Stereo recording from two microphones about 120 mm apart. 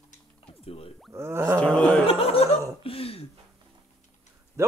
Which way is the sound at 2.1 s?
55° left (ahead or behind).